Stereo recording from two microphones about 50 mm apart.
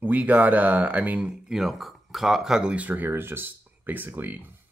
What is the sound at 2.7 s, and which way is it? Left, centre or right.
Speech, right.